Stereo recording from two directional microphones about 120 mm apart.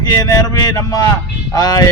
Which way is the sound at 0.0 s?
30° left (ahead or behind).